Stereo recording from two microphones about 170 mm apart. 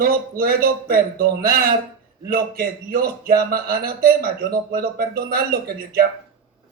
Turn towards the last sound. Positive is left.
turn(degrees=-60)  # may be behind; listen again after turning